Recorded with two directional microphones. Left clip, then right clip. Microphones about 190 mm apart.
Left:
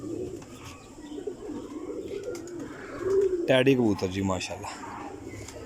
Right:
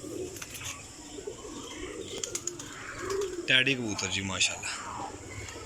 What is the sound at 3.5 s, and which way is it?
Speech, 45° left (ahead or behind).